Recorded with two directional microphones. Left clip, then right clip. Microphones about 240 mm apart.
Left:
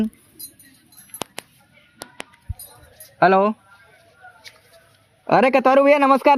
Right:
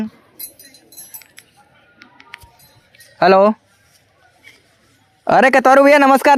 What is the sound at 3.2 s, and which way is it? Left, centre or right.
Speech, centre.